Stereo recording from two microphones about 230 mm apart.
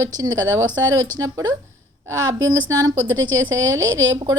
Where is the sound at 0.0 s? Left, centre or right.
Centre.